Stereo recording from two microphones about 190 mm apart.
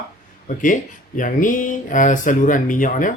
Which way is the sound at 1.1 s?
45° left (ahead or behind).